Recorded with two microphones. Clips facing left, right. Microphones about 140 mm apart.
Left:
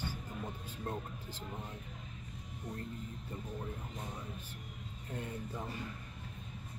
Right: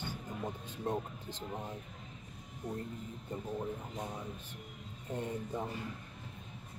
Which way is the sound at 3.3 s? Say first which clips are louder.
Right 6 dB; 25° right (ahead or behind).